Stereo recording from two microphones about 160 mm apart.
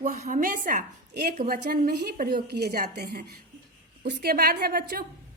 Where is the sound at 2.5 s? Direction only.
85° right.